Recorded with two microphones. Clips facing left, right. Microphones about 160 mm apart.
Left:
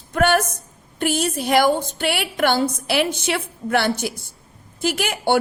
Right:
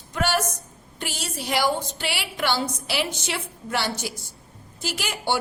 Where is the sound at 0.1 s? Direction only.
55° left (ahead or behind).